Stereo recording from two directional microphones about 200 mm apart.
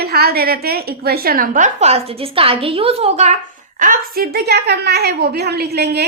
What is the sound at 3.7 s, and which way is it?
A woman's voice, 45° right (ahead or behind).